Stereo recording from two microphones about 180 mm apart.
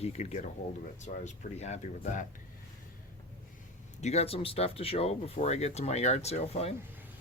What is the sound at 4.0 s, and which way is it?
Speech, 40° left (ahead or behind).